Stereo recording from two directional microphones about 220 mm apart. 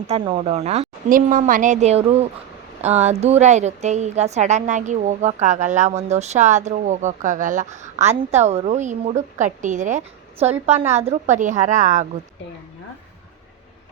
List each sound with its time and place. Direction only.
0.1 s a woman's voice: 30° right (ahead or behind)